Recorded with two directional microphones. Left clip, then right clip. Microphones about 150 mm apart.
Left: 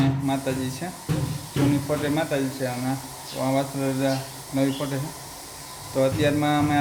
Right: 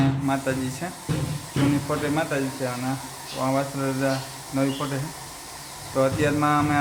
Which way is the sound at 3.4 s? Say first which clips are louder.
Even; 10° left (ahead or behind).